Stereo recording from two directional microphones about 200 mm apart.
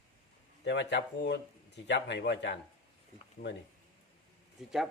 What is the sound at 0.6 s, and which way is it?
Speech, 60° left (ahead or behind).